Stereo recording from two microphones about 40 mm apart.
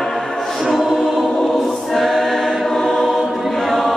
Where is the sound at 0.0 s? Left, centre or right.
Centre.